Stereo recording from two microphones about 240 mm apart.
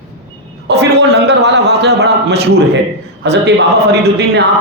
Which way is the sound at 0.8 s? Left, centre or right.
Right.